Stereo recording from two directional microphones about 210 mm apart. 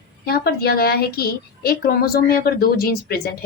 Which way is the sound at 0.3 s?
45° left (ahead or behind).